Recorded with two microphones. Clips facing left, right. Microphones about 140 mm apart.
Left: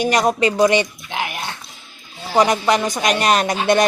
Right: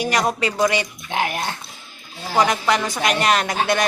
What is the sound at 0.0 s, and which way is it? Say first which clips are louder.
Speech: left 4 dB; 20° left (ahead or behind).